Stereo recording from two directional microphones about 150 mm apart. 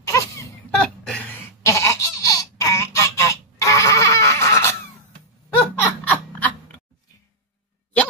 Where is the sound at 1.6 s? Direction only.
20° left (ahead or behind).